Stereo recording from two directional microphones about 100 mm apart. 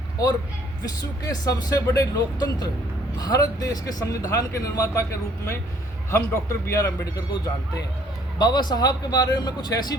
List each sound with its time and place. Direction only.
0.9 s speech: 40° left (ahead or behind)
6.1 s speech: 30° left (ahead or behind)